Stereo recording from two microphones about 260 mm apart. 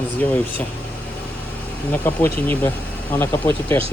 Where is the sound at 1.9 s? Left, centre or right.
Centre.